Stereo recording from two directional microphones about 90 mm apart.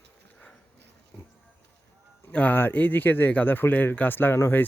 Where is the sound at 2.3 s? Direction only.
20° left (ahead or behind).